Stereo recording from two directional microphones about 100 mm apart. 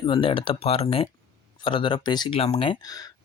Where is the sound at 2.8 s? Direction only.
40° left (ahead or behind).